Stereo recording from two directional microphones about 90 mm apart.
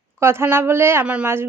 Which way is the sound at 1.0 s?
15° right (ahead or behind).